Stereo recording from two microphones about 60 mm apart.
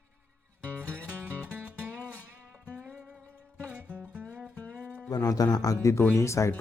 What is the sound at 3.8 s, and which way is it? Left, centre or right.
Music, right.